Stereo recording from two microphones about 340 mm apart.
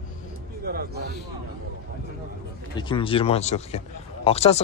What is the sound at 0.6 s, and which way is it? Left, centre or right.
Speech, right.